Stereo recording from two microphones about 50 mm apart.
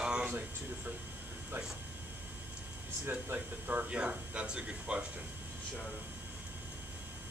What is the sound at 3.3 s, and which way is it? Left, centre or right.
Speech, right.